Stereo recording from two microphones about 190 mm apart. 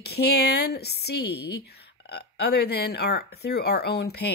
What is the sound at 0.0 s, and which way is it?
Speech, 60° left (ahead or behind).